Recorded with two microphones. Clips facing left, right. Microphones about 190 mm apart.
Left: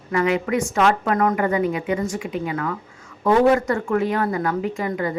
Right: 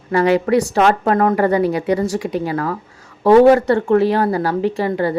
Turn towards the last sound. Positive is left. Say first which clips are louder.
# right 6 dB
turn(degrees=-35)  # may be behind; listen again after turning